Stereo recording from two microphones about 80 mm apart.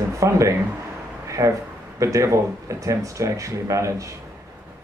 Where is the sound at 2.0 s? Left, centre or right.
Right.